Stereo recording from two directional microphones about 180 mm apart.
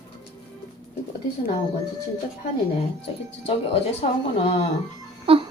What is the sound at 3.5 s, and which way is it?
Speech, 35° left (ahead or behind).